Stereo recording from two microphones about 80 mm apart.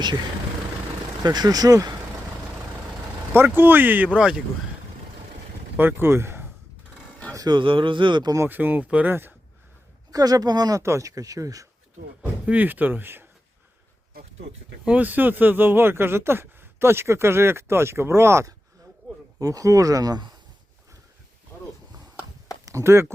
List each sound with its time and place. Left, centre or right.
1.2 s speech: right
3.3 s speech: right
5.7 s speech: right
7.3 s speech: right
8.4 s speech: right
10.1 s speech: right
12.2 s speech: right
14.8 s speech: centre
19.4 s speech: right
22.6 s speech: right